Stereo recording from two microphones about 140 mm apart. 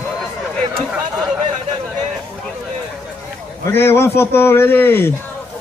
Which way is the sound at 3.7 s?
15° left (ahead or behind).